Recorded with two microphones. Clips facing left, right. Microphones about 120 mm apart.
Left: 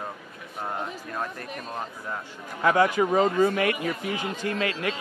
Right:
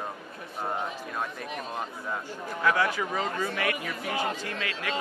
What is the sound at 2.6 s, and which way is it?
A man's voice, 40° left (ahead or behind).